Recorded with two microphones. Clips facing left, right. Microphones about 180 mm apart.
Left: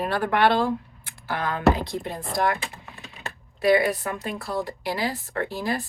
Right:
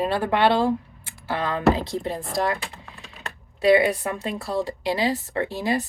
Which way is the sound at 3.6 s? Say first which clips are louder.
Right 2 dB; 25° right (ahead or behind).